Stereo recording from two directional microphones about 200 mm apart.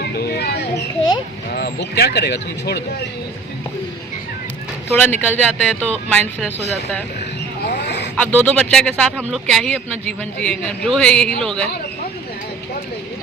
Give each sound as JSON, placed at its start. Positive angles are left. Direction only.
{"t": 0.0, "sound": "mouse", "side_deg": 50}
{"t": 1.5, "sound": "speech", "side_deg": 55}
{"t": 4.9, "sound": "a man's voice", "side_deg": 5}
{"t": 7.7, "sound": "a sound", "side_deg": 60}
{"t": 8.2, "sound": "a man's voice", "side_deg": 5}